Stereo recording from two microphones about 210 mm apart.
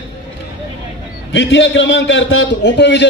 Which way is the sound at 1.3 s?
60° left (ahead or behind).